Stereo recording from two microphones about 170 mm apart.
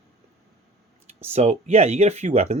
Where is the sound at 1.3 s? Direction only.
40° right (ahead or behind).